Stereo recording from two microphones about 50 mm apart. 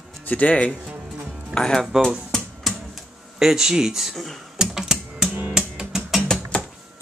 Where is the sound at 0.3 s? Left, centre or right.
Left.